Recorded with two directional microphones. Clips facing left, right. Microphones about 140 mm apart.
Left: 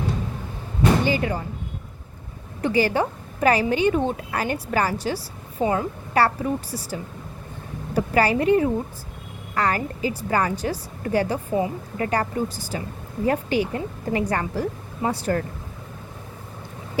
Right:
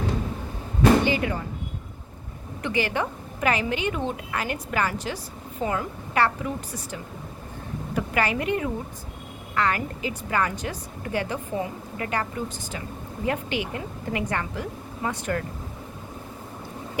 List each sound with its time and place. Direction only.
0.8 s vehicle: 35° left (ahead or behind)
2.6 s a woman's voice: 35° left (ahead or behind)